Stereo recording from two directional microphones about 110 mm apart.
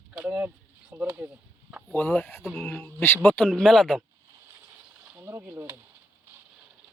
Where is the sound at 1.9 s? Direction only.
15° left (ahead or behind).